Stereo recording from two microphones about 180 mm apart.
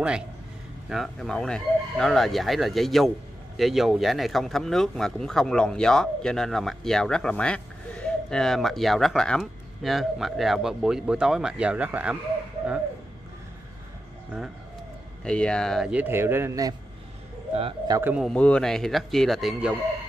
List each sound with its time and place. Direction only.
0.8 s speech: centre (ahead or behind)
15.2 s speech: 5° left (ahead or behind); by 16.7 s 15° right (ahead or behind)
17.6 s speech: 30° right (ahead or behind)
17.9 s speech: 10° right (ahead or behind)
18.2 s speech: 5° left (ahead or behind)